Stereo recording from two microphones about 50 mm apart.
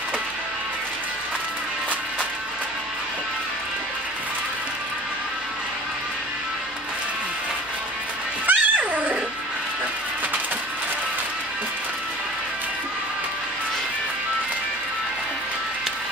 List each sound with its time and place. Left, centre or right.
8.5 s music: right